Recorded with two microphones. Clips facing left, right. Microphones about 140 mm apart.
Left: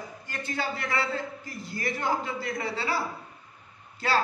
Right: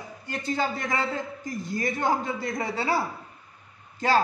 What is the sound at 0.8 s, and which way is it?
Speech, 15° right (ahead or behind).